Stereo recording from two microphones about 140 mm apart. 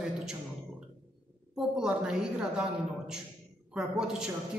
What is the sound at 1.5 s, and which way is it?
A woman's voice, 5° right (ahead or behind).